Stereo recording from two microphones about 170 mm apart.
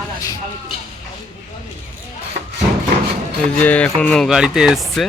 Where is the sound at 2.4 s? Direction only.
65° right (ahead or behind).